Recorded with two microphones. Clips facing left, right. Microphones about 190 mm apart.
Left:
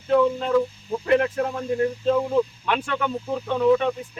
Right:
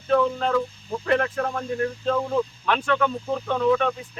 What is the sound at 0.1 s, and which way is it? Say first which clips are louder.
Speech: left 2 dB; 15° left (ahead or behind).